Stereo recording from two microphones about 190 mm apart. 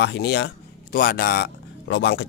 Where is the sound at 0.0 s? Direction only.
60° left (ahead or behind).